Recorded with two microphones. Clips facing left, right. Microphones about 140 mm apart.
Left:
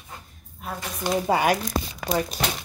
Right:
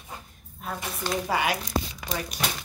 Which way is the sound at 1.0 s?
15° left (ahead or behind).